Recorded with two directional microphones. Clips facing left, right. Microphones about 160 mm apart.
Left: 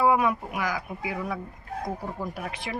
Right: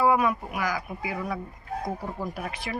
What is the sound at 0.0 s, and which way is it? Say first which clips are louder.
Speech: even; 20° left (ahead or behind).